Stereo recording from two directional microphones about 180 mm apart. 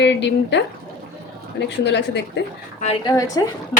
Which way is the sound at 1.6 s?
70° left (ahead or behind).